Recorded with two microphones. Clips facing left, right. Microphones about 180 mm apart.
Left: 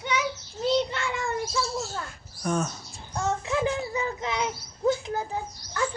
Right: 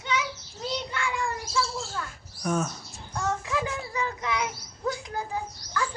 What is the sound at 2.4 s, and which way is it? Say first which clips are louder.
Speech: even; 5° right (ahead or behind).